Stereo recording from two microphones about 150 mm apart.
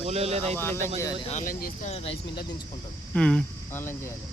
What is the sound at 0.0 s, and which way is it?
Speech, 45° right (ahead or behind).